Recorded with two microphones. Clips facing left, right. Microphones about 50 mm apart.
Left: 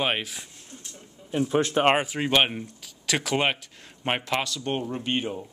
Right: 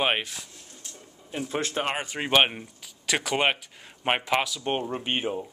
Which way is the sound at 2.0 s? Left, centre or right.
Centre.